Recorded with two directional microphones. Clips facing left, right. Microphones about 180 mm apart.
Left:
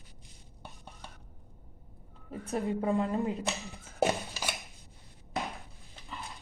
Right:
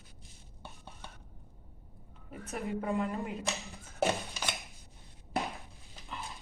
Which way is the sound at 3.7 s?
15° left (ahead or behind).